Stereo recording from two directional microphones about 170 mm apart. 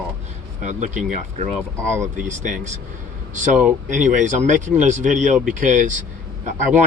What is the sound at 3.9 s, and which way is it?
A man's voice, 45° right (ahead or behind).